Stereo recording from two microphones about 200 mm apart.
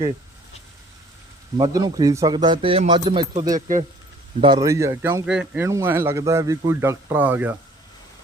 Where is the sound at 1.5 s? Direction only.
20° right (ahead or behind).